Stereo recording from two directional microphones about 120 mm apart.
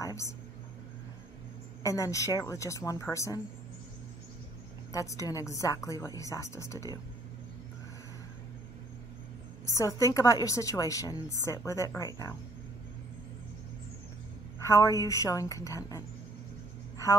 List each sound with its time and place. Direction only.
0.0 s a sound: 25° left (ahead or behind)
1.8 s a woman's voice: 25° left (ahead or behind)
4.9 s a woman's voice: 25° left (ahead or behind)
9.7 s a woman's voice: 25° left (ahead or behind)
14.6 s a woman's voice: 25° left (ahead or behind)